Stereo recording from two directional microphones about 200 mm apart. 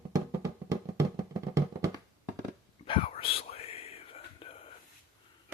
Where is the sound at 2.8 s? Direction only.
25° left (ahead or behind).